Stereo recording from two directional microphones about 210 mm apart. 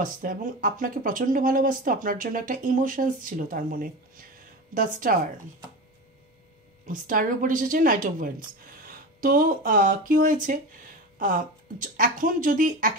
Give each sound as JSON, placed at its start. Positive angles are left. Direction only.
{"t": 0.0, "sound": "speech", "side_deg": -40}
{"t": 6.9, "sound": "speech", "side_deg": -40}